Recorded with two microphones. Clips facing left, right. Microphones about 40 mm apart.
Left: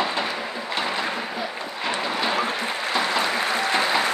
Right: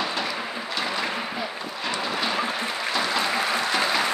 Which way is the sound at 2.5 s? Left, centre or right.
Left.